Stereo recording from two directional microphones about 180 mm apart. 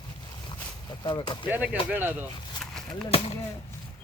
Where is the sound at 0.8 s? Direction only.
25° left (ahead or behind).